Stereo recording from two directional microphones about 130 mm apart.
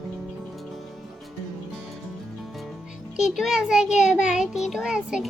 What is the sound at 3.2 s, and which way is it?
A child's voice, 5° right (ahead or behind).